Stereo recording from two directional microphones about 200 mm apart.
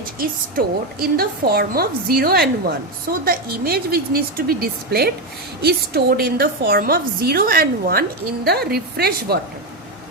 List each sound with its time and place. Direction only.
0.2 s a woman's voice: 45° right (ahead or behind)